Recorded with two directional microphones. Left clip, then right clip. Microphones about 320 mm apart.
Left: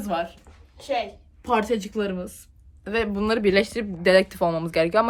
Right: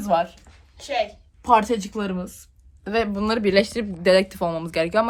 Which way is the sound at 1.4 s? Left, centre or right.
Centre.